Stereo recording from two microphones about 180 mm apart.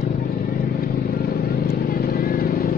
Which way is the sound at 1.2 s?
55° left (ahead or behind).